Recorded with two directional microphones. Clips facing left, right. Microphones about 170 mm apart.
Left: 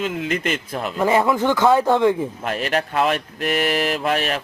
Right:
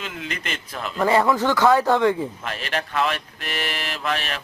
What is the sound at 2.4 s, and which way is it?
Speech, 45° left (ahead or behind).